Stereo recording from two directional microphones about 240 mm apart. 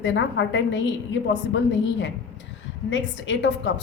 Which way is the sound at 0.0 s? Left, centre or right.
Left.